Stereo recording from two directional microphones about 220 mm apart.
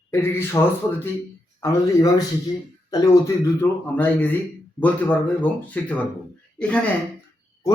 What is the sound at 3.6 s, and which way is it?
Speech, 10° left (ahead or behind).